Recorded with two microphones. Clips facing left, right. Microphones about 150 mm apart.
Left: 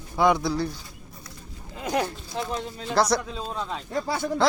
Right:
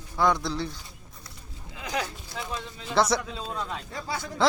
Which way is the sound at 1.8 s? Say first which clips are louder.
Left 5 dB; 50° left (ahead or behind).